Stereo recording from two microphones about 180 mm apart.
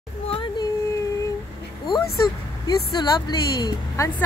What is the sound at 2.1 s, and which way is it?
Speech, 25° left (ahead or behind).